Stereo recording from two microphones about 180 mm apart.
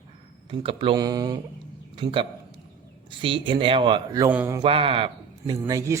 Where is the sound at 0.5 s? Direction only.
30° right (ahead or behind); by 4.6 s 15° right (ahead or behind).